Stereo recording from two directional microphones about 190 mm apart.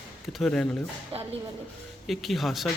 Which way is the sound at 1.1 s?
30° right (ahead or behind).